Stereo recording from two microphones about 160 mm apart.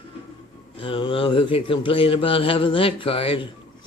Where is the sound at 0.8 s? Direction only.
35° left (ahead or behind).